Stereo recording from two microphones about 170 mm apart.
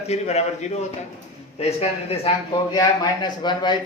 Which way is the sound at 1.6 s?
35° left (ahead or behind).